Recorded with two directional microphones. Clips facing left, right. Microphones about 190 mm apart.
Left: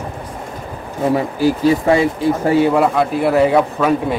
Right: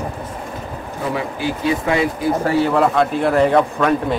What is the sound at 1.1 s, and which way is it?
Speech, 40° left (ahead or behind).